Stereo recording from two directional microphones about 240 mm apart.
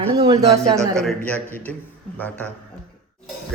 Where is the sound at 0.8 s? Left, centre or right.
Centre.